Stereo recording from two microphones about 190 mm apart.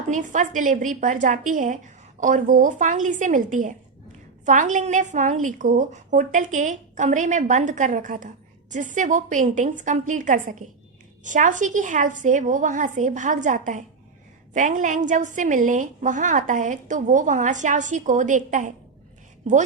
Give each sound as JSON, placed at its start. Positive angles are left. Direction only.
{"t": 0.1, "sound": "a woman's voice", "side_deg": -40}